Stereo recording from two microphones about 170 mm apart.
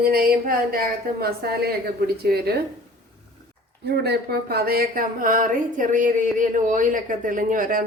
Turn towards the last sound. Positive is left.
turn(degrees=-55)  # may be behind; listen again after turning